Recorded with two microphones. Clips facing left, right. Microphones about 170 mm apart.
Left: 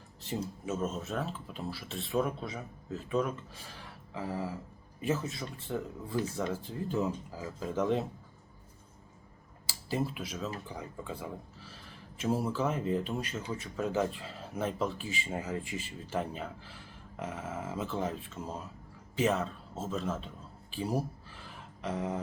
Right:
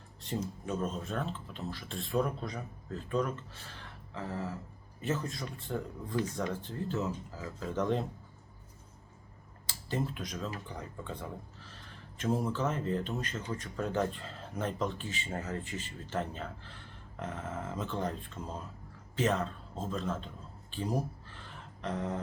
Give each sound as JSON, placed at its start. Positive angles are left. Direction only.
{"t": 0.2, "sound": "speech", "side_deg": 5}
{"t": 9.6, "sound": "a man's voice", "side_deg": 10}